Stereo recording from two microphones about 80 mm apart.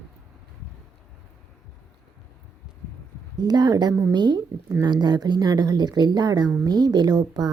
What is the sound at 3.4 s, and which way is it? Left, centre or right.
A woman's voice, right.